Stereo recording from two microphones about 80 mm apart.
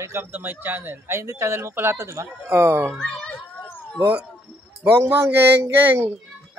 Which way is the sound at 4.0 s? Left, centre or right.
Right.